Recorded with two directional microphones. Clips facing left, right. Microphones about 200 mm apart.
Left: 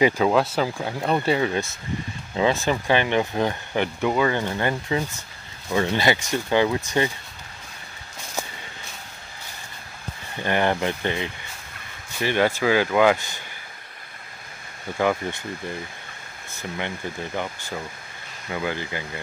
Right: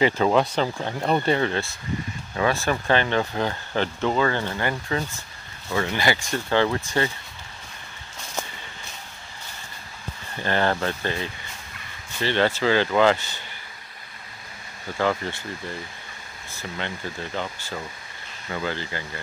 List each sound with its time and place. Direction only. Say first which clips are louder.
0.0 s speech: left 1 dB; 5° left (ahead or behind)
2.3 s speech: left 2 dB; 20° left (ahead or behind)
10.4 s speech: left 1 dB; 15° left (ahead or behind)
15.0 s speech: left 1 dB; 15° left (ahead or behind)
16.5 s speech: left 2 dB; 15° left (ahead or behind)